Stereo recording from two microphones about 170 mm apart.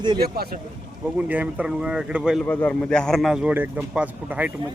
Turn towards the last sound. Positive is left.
turn(degrees=-10)  # may be behind; listen again after turning